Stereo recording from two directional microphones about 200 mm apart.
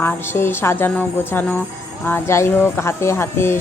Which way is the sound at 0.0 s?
10° left (ahead or behind).